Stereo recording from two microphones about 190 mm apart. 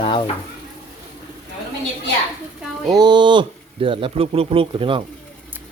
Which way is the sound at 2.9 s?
20° right (ahead or behind).